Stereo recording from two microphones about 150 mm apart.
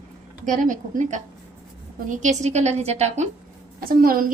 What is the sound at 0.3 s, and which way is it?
A woman's voice, 55° right (ahead or behind).